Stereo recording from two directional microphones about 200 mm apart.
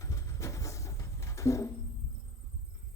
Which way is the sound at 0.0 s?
15° left (ahead or behind).